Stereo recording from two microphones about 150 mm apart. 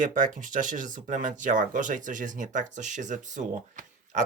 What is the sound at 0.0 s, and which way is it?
Speech, 60° right (ahead or behind).